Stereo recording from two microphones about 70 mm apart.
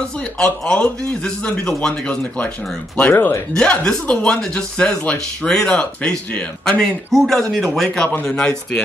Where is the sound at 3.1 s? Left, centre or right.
Left.